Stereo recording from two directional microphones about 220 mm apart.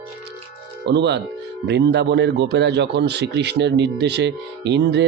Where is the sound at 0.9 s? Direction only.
50° right (ahead or behind).